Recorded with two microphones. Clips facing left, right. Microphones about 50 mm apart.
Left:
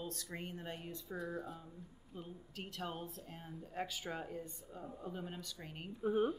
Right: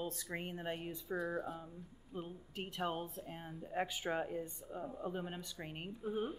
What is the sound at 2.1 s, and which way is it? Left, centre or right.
A woman's voice, right.